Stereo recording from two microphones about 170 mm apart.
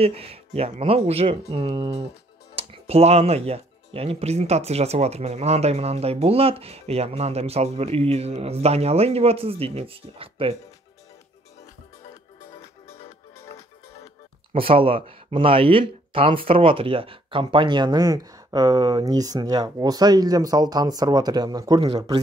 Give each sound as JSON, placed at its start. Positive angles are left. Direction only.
{"t": 0.0, "sound": "speech", "side_deg": -35}
{"t": 12.4, "sound": "music", "side_deg": 35}
{"t": 14.5, "sound": "speech", "side_deg": -30}